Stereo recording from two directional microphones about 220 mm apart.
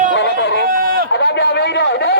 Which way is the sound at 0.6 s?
40° right (ahead or behind).